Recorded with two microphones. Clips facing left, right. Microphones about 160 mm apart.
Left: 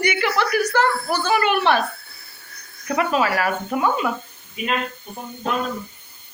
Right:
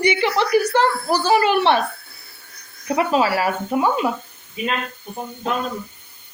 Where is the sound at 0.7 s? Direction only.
30° right (ahead or behind).